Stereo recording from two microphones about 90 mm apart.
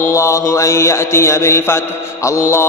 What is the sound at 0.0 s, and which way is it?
Mantra, 35° left (ahead or behind).